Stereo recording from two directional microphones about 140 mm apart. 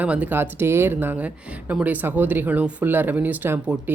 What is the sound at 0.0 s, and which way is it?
Speech, 10° right (ahead or behind).